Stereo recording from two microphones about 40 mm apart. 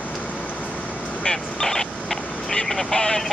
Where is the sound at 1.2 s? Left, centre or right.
Centre.